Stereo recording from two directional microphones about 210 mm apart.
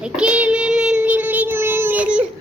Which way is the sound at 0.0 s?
5° right (ahead or behind).